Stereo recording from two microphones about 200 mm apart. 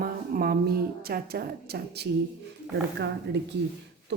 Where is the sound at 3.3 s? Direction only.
55° right (ahead or behind).